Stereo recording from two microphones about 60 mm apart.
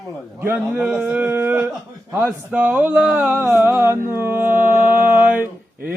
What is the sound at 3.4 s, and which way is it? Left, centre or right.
Mantra, right.